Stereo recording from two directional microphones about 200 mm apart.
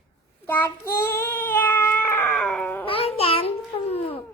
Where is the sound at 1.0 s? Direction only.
10° left (ahead or behind).